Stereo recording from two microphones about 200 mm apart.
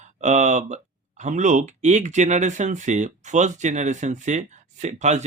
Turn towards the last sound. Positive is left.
turn(degrees=-35)  # may be behind; listen again after turning